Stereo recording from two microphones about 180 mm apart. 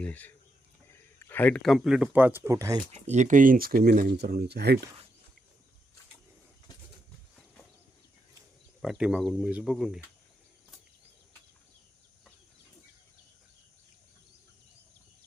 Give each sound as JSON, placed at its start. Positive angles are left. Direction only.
{"t": 0.0, "sound": "speech", "side_deg": 10}
{"t": 3.1, "sound": "speech", "side_deg": -45}
{"t": 8.8, "sound": "speech", "side_deg": 0}